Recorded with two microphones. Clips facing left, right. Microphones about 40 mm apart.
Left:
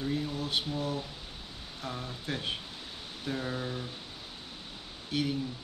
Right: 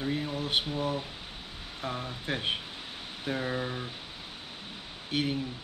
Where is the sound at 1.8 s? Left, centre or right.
Right.